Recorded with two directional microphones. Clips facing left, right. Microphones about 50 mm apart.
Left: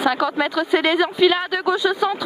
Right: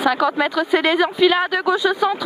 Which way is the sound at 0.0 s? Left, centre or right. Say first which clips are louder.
Right 2 dB; right.